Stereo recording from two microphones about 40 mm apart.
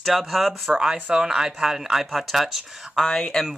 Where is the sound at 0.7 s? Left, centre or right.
Right; by 3.2 s centre.